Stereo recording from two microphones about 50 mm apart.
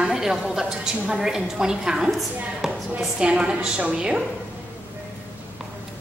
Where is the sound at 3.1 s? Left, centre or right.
Right.